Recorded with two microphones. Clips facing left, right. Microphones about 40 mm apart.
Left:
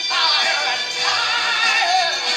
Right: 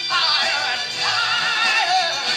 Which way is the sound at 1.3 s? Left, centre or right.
Centre.